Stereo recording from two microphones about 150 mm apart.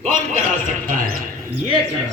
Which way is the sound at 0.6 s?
60° right (ahead or behind).